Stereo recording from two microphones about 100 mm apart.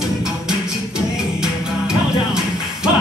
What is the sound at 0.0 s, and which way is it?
Music, 5° right (ahead or behind).